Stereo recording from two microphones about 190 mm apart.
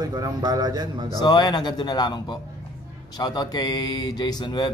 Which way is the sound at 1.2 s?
20° left (ahead or behind).